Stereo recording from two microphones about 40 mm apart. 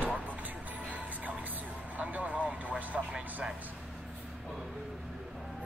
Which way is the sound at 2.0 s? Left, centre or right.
Right.